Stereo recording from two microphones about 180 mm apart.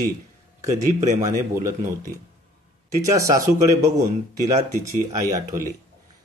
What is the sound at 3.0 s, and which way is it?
Speech, 15° right (ahead or behind).